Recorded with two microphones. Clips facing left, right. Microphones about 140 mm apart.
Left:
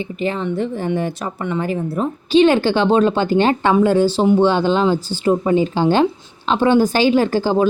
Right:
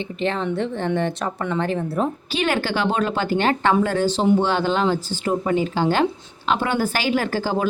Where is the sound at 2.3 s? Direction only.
20° left (ahead or behind).